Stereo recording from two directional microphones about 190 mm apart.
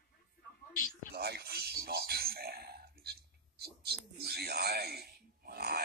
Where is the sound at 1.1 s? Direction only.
55° right (ahead or behind).